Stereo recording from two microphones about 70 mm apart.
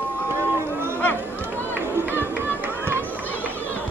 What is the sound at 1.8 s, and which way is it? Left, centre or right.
Music, right.